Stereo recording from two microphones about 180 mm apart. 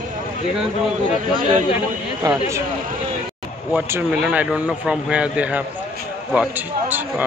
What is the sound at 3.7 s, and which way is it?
A man's voice, 10° right (ahead or behind).